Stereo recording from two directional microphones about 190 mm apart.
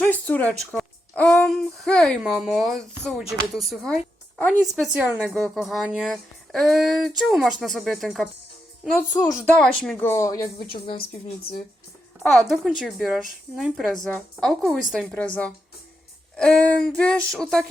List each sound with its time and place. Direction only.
0.0 s a sound: 10° left (ahead or behind)
3.1 s a woman's voice: centre (ahead or behind)
9.2 s speech: 15° left (ahead or behind)
9.6 s speech: 5° left (ahead or behind)
12.2 s a woman's voice: centre (ahead or behind)